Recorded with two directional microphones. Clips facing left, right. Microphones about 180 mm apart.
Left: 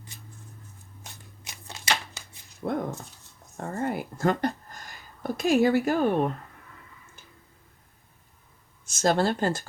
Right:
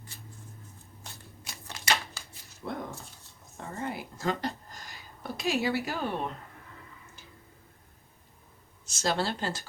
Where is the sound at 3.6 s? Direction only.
50° left (ahead or behind).